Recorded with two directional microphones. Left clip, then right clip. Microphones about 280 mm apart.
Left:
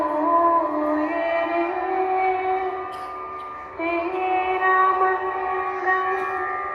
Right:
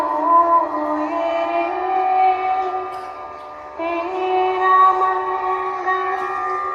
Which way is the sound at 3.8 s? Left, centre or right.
Right.